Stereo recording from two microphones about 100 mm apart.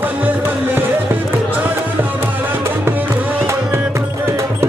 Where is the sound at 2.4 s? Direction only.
20° right (ahead or behind).